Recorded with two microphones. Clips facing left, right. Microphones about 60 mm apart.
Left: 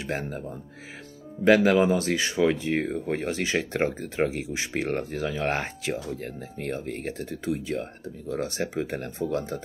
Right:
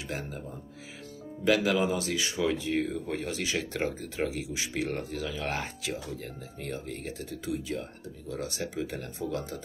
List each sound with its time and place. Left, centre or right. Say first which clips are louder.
0.0 s speech: left 6 dB; left
1.4 s speech: left 6 dB; left